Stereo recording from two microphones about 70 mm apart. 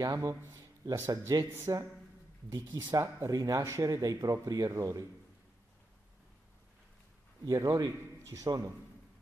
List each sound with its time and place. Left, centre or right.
0.0 s a man's voice: right
0.3 s speech: right
1.4 s speech: right
2.5 s speech: right
3.0 s speech: right
7.4 s speech: right
8.3 s speech: right